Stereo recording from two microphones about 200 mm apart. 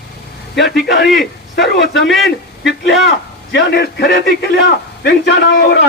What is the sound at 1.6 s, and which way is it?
A man's voice, 60° left (ahead or behind).